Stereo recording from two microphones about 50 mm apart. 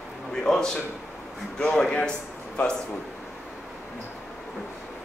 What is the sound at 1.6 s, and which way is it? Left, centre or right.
Speech, centre.